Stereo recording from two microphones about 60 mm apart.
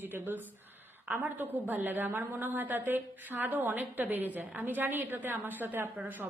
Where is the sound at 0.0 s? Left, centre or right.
Right.